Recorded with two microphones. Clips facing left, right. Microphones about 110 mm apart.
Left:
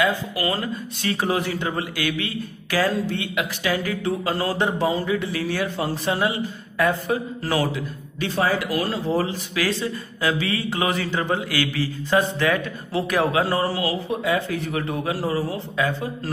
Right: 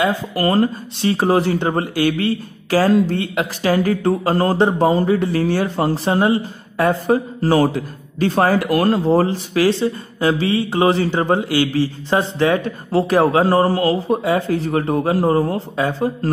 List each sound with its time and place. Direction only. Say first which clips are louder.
0.4 s a man's voice: right 8 dB; 40° right (ahead or behind)
9.6 s a man's voice: right 8 dB; 30° right (ahead or behind)